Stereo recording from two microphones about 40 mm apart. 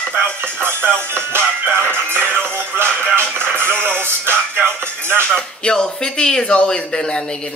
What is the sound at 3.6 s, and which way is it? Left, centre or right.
Music, right.